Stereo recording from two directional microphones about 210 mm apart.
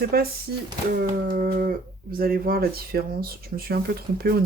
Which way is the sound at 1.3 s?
45° right (ahead or behind).